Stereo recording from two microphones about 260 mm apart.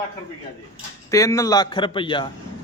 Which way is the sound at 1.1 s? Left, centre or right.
Centre.